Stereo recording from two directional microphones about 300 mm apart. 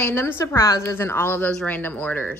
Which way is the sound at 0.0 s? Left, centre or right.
Centre.